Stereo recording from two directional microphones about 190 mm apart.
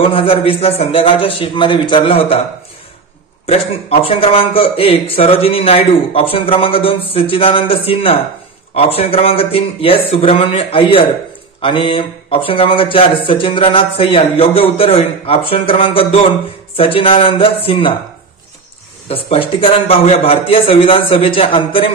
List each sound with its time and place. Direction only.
0.0 s a man's voice: 30° left (ahead or behind)
3.4 s a man's voice: 30° left (ahead or behind)
19.0 s a man's voice: 30° left (ahead or behind)